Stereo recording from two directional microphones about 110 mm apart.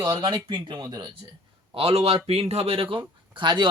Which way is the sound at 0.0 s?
40° right (ahead or behind).